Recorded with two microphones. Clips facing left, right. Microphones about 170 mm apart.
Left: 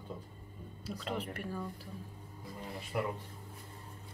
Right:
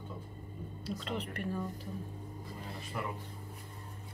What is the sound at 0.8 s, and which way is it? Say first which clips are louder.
Speech: even; 5° left (ahead or behind).